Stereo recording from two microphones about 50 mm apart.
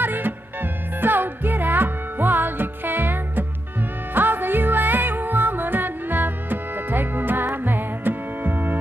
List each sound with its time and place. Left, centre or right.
0.0 s music: right